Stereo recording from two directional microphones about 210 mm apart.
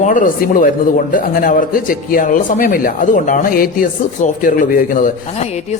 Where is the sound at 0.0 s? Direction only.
40° left (ahead or behind).